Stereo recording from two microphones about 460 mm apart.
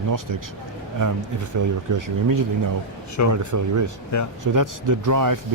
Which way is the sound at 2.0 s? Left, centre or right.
Right.